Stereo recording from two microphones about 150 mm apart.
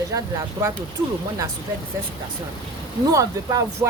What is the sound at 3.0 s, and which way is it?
Speech, 25° right (ahead or behind).